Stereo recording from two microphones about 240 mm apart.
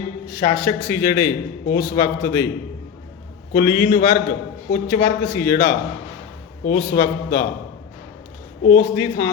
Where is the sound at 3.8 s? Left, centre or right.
Left.